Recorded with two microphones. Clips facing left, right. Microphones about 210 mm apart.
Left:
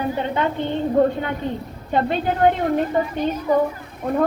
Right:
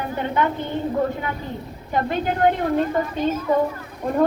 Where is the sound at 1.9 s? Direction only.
20° left (ahead or behind).